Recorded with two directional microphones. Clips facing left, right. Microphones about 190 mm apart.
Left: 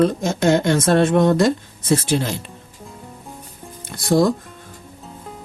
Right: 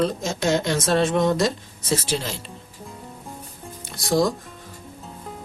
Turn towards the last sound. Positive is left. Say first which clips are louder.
# left 4 dB
turn(degrees=55)  # may be behind; listen again after turning